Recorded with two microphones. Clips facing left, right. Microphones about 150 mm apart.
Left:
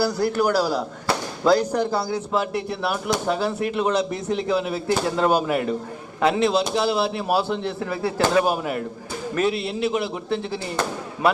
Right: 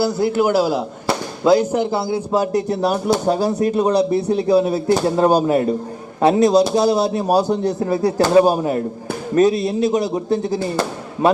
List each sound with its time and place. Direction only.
0.0 s a man's voice: 20° right (ahead or behind)
2.3 s speech: 40° right (ahead or behind)